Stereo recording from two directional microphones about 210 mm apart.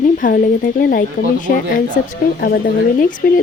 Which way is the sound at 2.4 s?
45° left (ahead or behind).